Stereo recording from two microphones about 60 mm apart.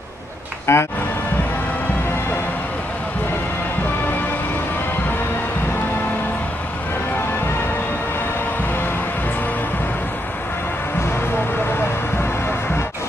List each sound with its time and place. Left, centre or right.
0.7 s speech: left